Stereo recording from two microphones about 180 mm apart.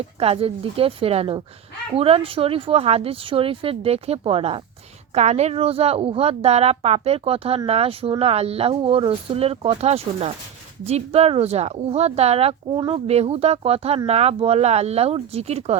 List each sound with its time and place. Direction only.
0.2 s speech: 35° right (ahead or behind)